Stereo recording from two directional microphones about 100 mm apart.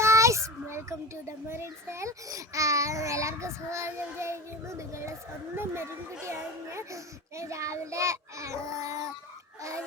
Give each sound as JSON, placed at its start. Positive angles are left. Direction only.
{"t": 0.0, "sound": "child singing", "side_deg": -30}
{"t": 1.5, "sound": "a child's voice", "side_deg": -25}